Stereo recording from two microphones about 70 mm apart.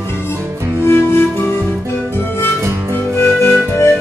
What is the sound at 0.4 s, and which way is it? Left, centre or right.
Music, right.